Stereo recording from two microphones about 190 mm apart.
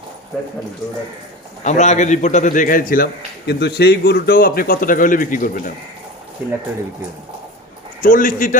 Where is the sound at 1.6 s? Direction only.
40° left (ahead or behind).